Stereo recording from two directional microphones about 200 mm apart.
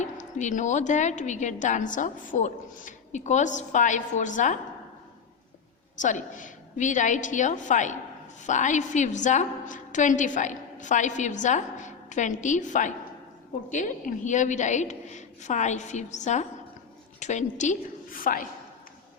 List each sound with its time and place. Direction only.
0.0 s a woman's voice: 35° left (ahead or behind)
6.0 s a woman's voice: 40° left (ahead or behind)